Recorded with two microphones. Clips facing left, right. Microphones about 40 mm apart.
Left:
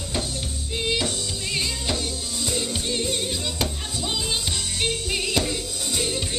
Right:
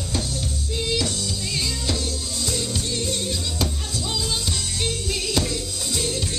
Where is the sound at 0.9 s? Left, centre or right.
Left.